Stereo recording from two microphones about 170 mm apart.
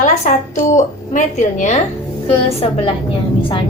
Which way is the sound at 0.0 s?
45° left (ahead or behind).